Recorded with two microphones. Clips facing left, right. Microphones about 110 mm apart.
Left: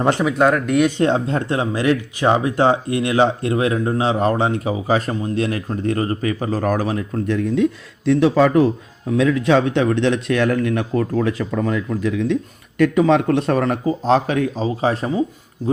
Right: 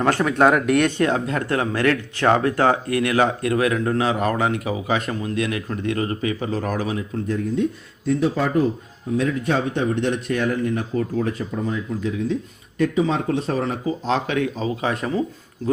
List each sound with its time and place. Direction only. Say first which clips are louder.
0.0 s speech: left 2 dB; 20° left (ahead or behind)
0.3 s speech: even; centre (ahead or behind)
0.9 s speech: left 3 dB; 25° left (ahead or behind); by 7.2 s 45° left (ahead or behind)
7.3 s a man's voice: left 5 dB; 90° left; by 13.7 s 70° left (ahead or behind)
13.8 s speech: left 6 dB; 40° left (ahead or behind)